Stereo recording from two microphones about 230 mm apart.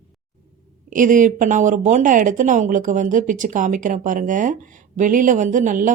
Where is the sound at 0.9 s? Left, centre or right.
Right.